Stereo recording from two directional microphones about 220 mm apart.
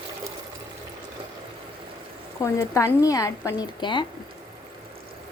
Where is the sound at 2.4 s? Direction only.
15° left (ahead or behind).